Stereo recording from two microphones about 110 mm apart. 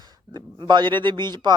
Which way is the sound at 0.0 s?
40° right (ahead or behind).